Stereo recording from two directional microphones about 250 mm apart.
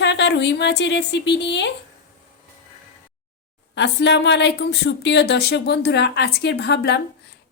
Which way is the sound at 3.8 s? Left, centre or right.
Left.